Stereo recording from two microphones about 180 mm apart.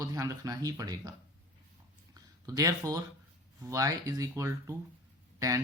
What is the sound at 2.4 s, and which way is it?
Speech, 20° right (ahead or behind).